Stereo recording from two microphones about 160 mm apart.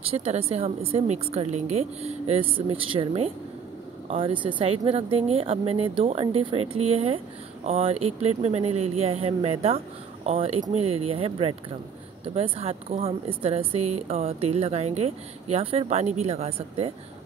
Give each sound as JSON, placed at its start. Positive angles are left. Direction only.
{"t": 0.0, "sound": "a woman's voice", "side_deg": -40}